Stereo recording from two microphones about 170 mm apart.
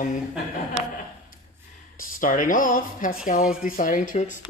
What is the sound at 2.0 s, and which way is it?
A woman's voice, 55° left (ahead or behind).